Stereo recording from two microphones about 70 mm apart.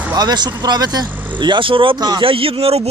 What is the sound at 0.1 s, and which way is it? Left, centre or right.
Speech, right.